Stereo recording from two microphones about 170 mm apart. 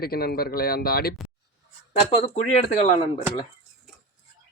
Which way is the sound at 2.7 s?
40° left (ahead or behind).